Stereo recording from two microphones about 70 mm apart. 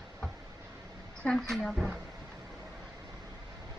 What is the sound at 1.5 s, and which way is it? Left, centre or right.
Speech, centre.